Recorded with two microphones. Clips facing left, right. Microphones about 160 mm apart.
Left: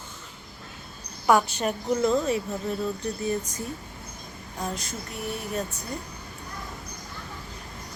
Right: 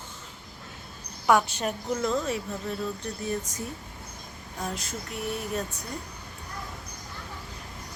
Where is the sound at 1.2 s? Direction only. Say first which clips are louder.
Left 1 dB; centre (ahead or behind).